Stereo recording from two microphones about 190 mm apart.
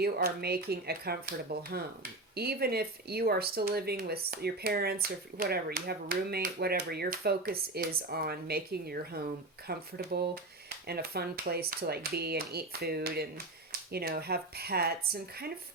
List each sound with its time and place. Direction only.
0.0 s speech: 55° right (ahead or behind)